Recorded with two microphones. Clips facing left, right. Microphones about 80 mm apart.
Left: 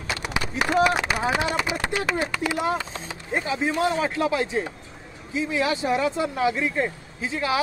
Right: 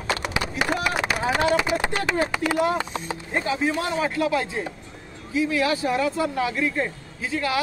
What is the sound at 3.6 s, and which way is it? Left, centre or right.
Speech, left.